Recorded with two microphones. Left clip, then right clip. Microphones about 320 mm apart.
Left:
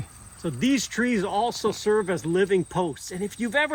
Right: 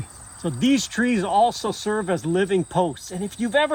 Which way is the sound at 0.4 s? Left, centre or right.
Centre.